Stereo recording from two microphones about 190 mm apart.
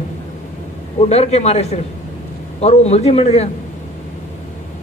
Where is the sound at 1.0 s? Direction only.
35° left (ahead or behind).